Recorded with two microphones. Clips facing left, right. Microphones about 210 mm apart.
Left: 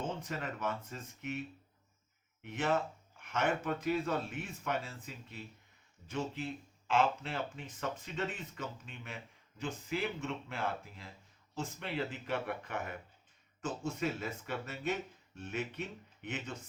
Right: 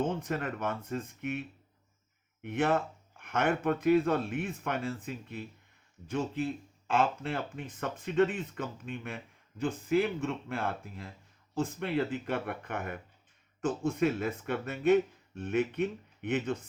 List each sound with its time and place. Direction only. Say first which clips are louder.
0.1 s speech: right 6 dB; 55° right (ahead or behind)
2.4 s speech: right 5 dB; 55° right (ahead or behind)